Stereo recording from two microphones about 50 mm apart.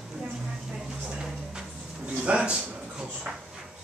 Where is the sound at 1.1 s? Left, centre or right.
Centre.